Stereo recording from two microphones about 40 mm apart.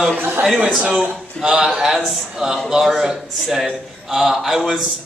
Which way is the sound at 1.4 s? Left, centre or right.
Centre.